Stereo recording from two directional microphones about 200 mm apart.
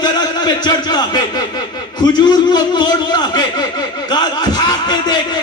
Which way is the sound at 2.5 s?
20° left (ahead or behind).